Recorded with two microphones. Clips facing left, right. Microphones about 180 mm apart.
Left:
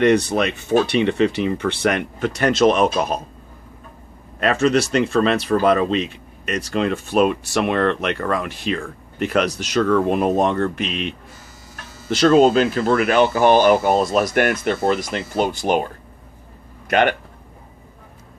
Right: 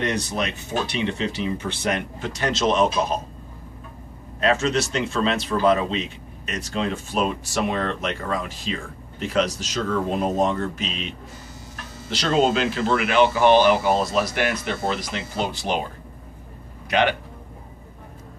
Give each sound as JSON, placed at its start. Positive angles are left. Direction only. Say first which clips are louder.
{"t": 0.0, "sound": "speech", "louder": "left 9 dB", "side_deg": 60}
{"t": 4.4, "sound": "speech", "louder": "left 4 dB", "side_deg": 60}
{"t": 12.1, "sound": "speech", "louder": "left 7 dB", "side_deg": 50}
{"t": 16.9, "sound": "speech", "louder": "left 3 dB", "side_deg": 50}